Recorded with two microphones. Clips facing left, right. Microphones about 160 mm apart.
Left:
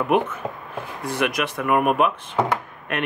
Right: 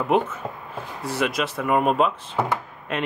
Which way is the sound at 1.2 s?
70° left (ahead or behind).